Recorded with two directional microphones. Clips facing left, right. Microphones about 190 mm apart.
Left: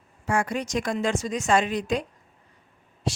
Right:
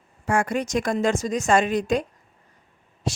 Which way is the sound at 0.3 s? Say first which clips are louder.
Right 3 dB; 50° right (ahead or behind).